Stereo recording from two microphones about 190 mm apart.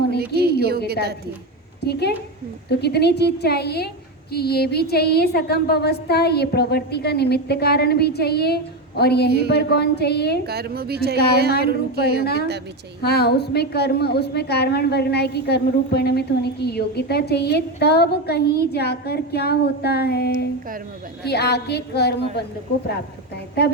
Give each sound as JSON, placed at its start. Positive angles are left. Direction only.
{"t": 0.3, "sound": "a sound", "side_deg": -55}
{"t": 1.8, "sound": "a woman's voice", "side_deg": 60}
{"t": 10.4, "sound": "a woman's voice", "side_deg": -55}
{"t": 12.2, "sound": "a woman's voice", "side_deg": 55}